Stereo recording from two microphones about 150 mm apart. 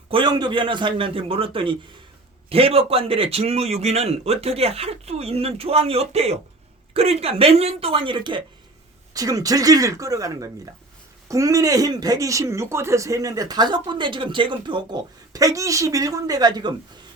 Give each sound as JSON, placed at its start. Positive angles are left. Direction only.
{"t": 0.1, "sound": "a man's voice", "side_deg": -30}